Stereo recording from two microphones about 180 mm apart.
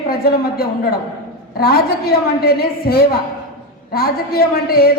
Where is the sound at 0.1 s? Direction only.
60° left (ahead or behind).